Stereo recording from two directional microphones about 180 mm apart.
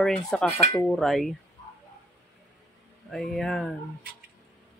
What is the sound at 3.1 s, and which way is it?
Speech, centre (ahead or behind).